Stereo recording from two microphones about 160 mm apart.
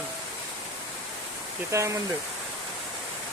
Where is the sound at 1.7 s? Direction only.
20° right (ahead or behind).